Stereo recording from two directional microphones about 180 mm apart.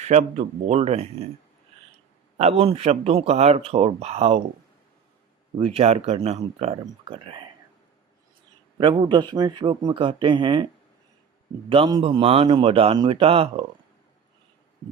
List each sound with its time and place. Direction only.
0.0 s speech: 40° right (ahead or behind)
2.4 s speech: 35° right (ahead or behind)
5.5 s speech: 35° right (ahead or behind)
8.8 s speech: 25° right (ahead or behind)
11.7 s speech: 30° right (ahead or behind)